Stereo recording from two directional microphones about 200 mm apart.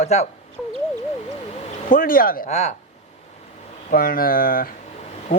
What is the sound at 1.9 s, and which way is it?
Speech, 45° left (ahead or behind).